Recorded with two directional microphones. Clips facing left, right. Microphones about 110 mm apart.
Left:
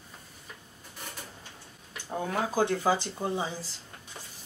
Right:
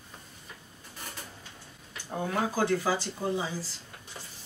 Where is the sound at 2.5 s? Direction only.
20° left (ahead or behind).